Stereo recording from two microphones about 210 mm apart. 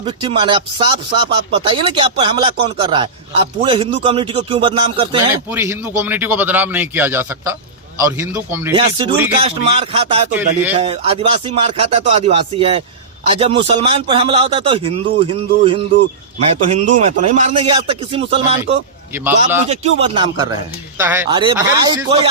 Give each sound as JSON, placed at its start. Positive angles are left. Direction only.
{"t": 0.0, "sound": "a man's voice", "side_deg": -25}
{"t": 5.3, "sound": "a man's voice", "side_deg": -10}
{"t": 8.7, "sound": "a man's voice", "side_deg": -20}
{"t": 10.3, "sound": "a man's voice", "side_deg": -10}
{"t": 10.8, "sound": "a man's voice", "side_deg": -25}
{"t": 17.7, "sound": "a man's voice", "side_deg": -25}
{"t": 21.0, "sound": "a man's voice", "side_deg": -10}
{"t": 21.2, "sound": "a man's voice", "side_deg": -20}